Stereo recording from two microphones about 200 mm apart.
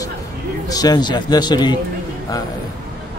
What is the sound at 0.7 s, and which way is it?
Speech, 20° left (ahead or behind).